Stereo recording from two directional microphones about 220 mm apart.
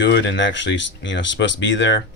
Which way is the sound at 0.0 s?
55° left (ahead or behind).